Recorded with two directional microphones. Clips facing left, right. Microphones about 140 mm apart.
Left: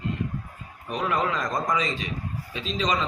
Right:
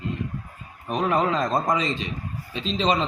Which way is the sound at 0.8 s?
30° right (ahead or behind).